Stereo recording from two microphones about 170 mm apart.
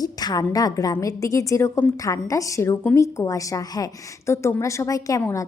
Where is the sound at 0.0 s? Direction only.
25° left (ahead or behind).